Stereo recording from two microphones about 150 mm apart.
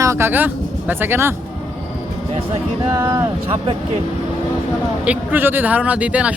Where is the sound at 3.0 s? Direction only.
20° right (ahead or behind).